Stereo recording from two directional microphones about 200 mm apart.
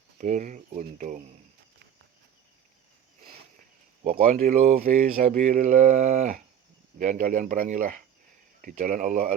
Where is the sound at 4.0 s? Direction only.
35° right (ahead or behind).